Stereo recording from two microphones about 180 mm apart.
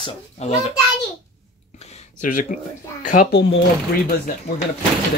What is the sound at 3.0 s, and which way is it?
Speech, 45° left (ahead or behind).